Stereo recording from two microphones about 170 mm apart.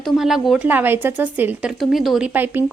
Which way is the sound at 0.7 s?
10° right (ahead or behind).